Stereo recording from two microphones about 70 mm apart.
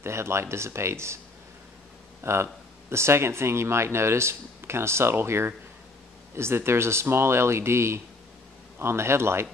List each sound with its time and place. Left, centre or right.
0.0 s speech: right
2.2 s speech: right